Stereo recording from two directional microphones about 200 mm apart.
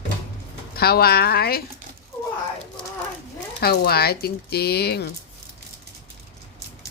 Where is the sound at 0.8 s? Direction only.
50° left (ahead or behind).